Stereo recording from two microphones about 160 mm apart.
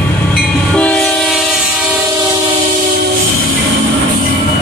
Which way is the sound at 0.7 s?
5° left (ahead or behind).